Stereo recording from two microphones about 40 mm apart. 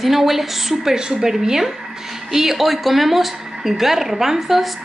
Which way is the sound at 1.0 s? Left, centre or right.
Centre.